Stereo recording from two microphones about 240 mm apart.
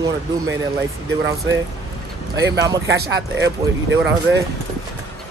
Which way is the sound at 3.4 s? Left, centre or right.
Right.